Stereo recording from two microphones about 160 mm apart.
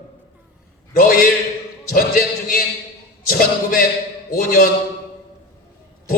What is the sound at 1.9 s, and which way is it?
A man's voice, 65° left (ahead or behind).